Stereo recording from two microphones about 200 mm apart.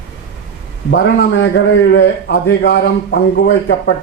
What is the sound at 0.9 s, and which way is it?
A man's voice, 65° left (ahead or behind).